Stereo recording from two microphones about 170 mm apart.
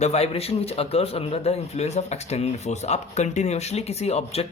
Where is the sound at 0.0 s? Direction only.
40° left (ahead or behind).